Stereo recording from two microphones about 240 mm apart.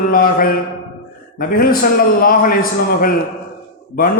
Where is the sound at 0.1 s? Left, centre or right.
Left.